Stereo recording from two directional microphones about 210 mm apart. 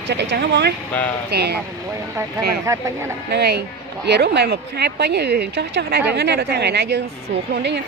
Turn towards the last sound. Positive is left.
turn(degrees=-55)  # may be behind; listen again after turning